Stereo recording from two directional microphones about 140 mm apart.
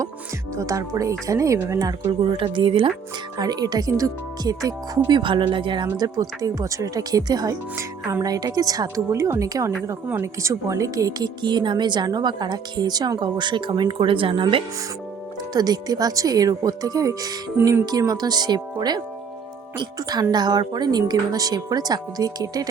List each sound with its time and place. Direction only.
0.5 s speech: 25° right (ahead or behind)
2.3 s speech: 35° right (ahead or behind)
3.3 s speech: 30° right (ahead or behind)